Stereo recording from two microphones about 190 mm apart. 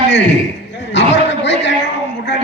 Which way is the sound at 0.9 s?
70° left (ahead or behind).